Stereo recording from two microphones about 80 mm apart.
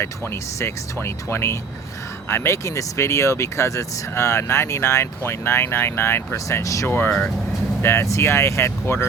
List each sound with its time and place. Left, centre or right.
0.0 s speech: left
6.8 s speech: left
7.1 s speech: centre
7.8 s speech: left